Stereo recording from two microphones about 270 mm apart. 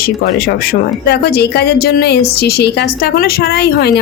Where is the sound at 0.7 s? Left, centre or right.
Left.